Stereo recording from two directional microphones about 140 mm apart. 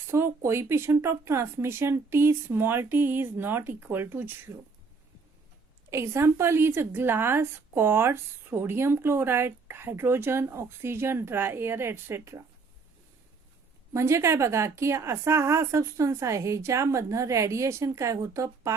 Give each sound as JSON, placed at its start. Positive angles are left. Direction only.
{"t": 0.4, "sound": "a woman's voice", "side_deg": -20}
{"t": 5.9, "sound": "a woman's voice", "side_deg": -20}
{"t": 13.9, "sound": "a woman's voice", "side_deg": -20}